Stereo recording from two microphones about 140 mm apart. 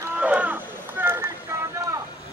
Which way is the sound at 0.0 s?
10° right (ahead or behind).